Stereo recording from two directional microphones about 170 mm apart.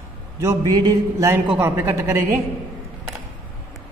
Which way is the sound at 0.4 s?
20° right (ahead or behind).